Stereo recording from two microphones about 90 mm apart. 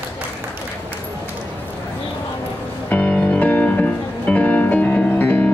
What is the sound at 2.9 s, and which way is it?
Music, 20° left (ahead or behind).